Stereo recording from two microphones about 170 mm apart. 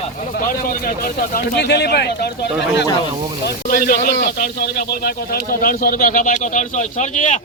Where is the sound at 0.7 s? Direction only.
60° left (ahead or behind); by 2.8 s 75° left (ahead or behind).